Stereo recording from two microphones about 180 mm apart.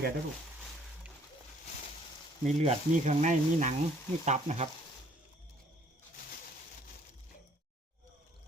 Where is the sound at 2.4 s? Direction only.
40° right (ahead or behind).